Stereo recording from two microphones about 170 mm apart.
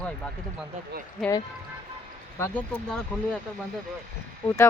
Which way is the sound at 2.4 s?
10° left (ahead or behind).